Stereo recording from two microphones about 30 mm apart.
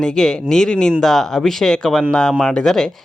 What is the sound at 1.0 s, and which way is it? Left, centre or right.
Speech, centre.